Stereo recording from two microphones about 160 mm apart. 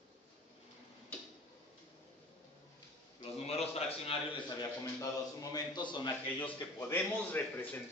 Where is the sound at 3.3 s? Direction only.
40° left (ahead or behind).